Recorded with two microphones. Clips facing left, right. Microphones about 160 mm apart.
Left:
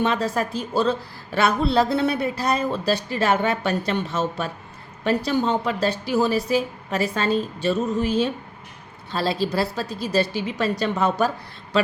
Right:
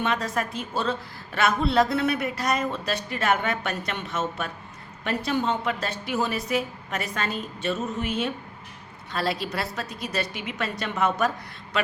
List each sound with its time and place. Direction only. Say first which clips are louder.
0.0 s a woman's voice: left 4 dB; 35° left (ahead or behind)